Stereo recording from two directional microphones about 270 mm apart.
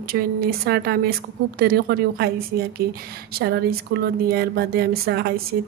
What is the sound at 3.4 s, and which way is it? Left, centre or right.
Speech, right.